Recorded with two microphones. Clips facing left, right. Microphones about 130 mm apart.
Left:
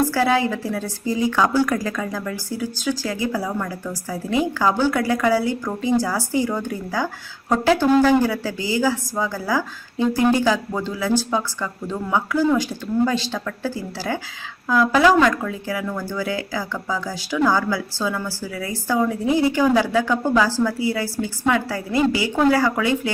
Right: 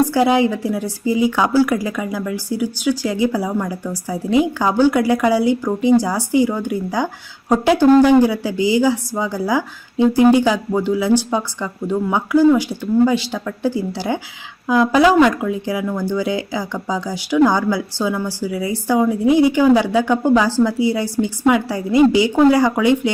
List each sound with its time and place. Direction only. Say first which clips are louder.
0.1 s a woman's voice: right 4 dB; 20° right (ahead or behind)